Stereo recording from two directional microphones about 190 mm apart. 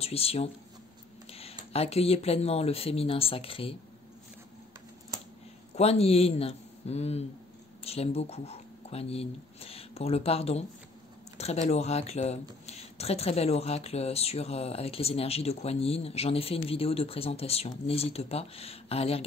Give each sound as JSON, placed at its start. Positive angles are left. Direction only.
{"t": 0.0, "sound": "speech", "side_deg": 30}
{"t": 1.3, "sound": "a sound", "side_deg": 30}
{"t": 1.7, "sound": "speech", "side_deg": 30}
{"t": 5.8, "sound": "speech", "side_deg": 35}